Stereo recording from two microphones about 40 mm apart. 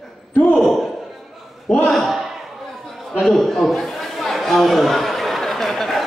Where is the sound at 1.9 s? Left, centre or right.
Centre.